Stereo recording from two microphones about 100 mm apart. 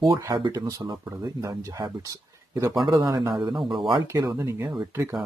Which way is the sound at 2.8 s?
40° right (ahead or behind).